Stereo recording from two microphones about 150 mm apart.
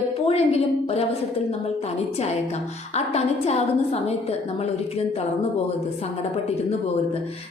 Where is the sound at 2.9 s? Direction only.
45° left (ahead or behind).